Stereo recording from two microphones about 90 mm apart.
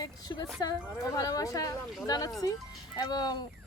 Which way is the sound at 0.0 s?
45° left (ahead or behind).